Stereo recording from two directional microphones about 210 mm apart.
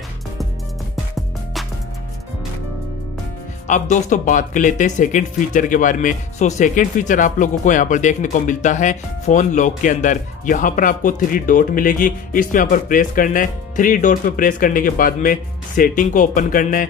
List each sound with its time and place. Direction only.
1.1 s music: centre (ahead or behind)
3.6 s speech: 35° left (ahead or behind)